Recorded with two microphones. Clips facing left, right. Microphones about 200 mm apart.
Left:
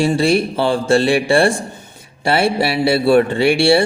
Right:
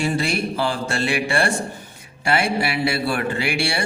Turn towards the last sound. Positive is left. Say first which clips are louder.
# left 11 dB
turn(degrees=30)  # may be behind; listen again after turning